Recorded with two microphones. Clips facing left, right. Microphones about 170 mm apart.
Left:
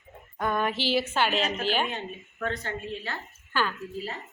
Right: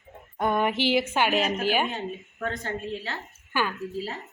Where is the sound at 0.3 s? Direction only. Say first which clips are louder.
Right 3 dB; 20° right (ahead or behind).